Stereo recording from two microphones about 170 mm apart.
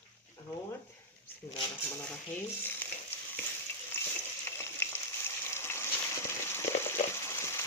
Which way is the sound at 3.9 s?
10° left (ahead or behind).